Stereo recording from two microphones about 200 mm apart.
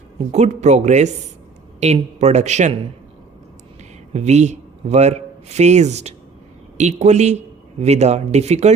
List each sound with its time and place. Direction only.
0.3 s speech: 35° right (ahead or behind)
4.1 s a man's voice: 35° right (ahead or behind)